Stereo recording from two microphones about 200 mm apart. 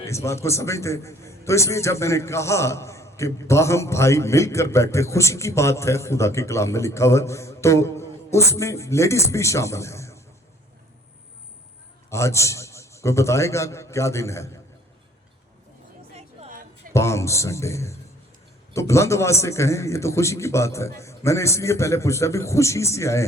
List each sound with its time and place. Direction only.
0.0 s a man's voice: 15° left (ahead or behind)
12.1 s a man's voice: 15° left (ahead or behind)
16.1 s a sound: 30° right (ahead or behind)
16.9 s a man's voice: 15° left (ahead or behind)